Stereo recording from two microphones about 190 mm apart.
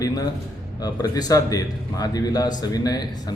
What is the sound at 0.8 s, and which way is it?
A man's voice, 20° left (ahead or behind).